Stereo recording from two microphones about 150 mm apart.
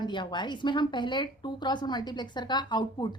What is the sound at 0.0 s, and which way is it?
A woman's voice, 30° left (ahead or behind).